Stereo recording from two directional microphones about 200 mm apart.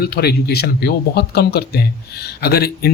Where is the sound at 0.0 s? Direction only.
50° left (ahead or behind).